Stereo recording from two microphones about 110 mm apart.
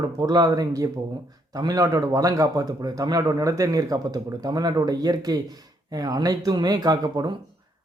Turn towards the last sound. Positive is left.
turn(degrees=-40)  # may be behind; listen again after turning